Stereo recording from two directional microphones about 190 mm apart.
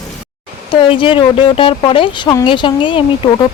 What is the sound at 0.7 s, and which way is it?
Speech, 25° left (ahead or behind).